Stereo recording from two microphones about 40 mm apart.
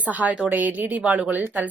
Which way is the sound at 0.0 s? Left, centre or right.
Right.